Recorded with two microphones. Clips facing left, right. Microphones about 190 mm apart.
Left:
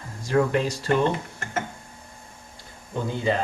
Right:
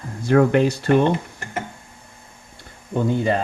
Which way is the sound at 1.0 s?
15° right (ahead or behind).